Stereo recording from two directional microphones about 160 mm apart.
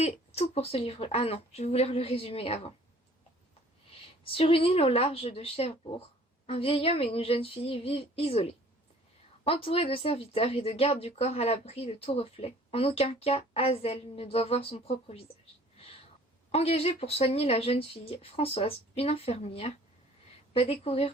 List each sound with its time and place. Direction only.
0.0 s speech: 40° left (ahead or behind)
4.2 s speech: 35° left (ahead or behind)
16.5 s speech: 40° left (ahead or behind)